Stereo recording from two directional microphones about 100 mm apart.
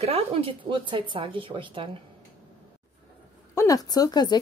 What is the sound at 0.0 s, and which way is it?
Speech, 80° right.